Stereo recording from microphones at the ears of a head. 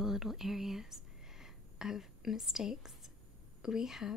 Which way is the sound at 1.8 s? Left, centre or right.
Left.